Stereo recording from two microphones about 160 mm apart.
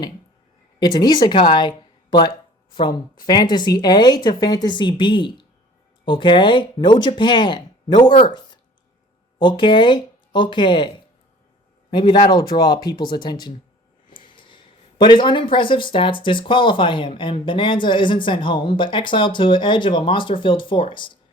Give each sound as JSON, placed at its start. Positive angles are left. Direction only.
{"t": 0.8, "sound": "a woman's voice", "side_deg": 25}